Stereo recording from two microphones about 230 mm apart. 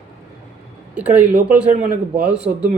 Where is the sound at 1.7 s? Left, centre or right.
Right.